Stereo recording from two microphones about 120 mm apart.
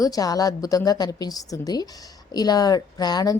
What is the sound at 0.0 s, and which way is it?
A woman's voice, 30° left (ahead or behind).